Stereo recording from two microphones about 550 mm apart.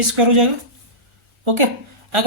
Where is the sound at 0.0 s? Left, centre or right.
Right.